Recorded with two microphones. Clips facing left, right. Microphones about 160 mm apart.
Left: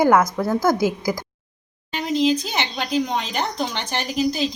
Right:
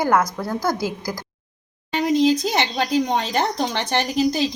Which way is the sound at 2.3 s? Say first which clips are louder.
Right 4 dB; 35° right (ahead or behind).